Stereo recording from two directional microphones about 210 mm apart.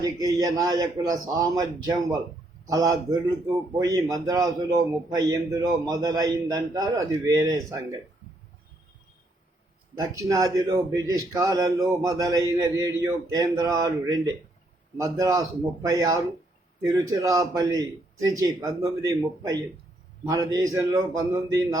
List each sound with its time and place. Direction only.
0.0 s speech: 15° right (ahead or behind)
10.0 s speech: 15° right (ahead or behind)
14.9 s speech: 15° right (ahead or behind)